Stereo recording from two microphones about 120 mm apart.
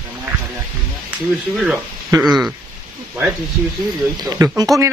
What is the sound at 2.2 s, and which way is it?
Speech, centre (ahead or behind).